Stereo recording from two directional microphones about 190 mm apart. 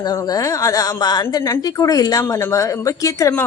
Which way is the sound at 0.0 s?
20° left (ahead or behind).